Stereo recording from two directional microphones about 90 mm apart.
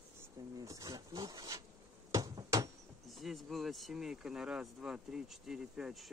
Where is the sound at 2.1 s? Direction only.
40° right (ahead or behind).